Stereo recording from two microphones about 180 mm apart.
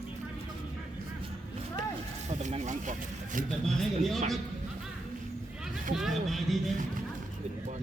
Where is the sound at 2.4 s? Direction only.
40° right (ahead or behind).